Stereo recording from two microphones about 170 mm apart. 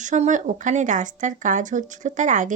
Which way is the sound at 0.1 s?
45° right (ahead or behind).